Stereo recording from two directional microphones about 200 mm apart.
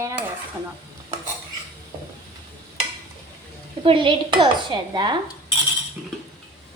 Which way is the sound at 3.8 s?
25° right (ahead or behind).